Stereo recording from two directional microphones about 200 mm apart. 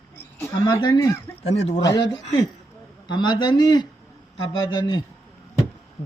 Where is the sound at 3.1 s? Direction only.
20° left (ahead or behind).